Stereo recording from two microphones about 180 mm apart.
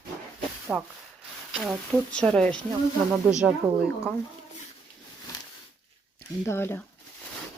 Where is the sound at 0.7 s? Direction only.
5° right (ahead or behind).